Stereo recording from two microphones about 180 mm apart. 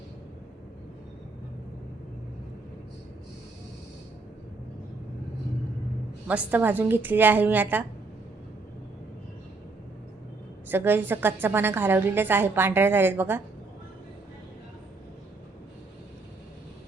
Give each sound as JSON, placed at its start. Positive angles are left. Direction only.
{"t": 6.2, "sound": "a woman's voice", "side_deg": -10}
{"t": 10.7, "sound": "a woman's voice", "side_deg": -10}